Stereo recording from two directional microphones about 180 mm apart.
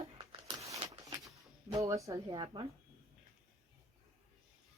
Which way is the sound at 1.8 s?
15° right (ahead or behind).